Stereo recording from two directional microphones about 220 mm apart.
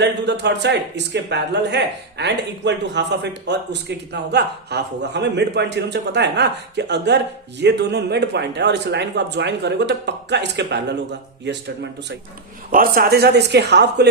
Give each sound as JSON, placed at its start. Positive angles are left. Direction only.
{"t": 0.0, "sound": "speech", "side_deg": -50}
{"t": 12.7, "sound": "speech", "side_deg": -40}